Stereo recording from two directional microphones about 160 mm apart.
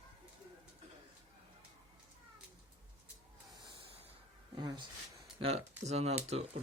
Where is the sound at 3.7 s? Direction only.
35° right (ahead or behind).